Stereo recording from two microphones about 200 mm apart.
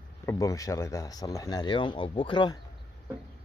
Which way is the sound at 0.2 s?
15° left (ahead or behind).